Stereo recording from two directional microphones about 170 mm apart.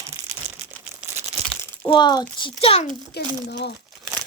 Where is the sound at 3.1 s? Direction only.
75° left (ahead or behind).